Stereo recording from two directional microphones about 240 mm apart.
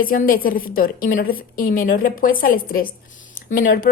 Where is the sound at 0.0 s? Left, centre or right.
Left.